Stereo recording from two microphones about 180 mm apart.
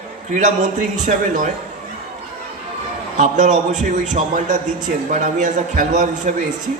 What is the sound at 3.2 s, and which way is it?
A man's voice, 45° right (ahead or behind).